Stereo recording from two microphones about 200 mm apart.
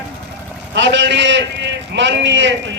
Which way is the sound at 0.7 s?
65° right (ahead or behind).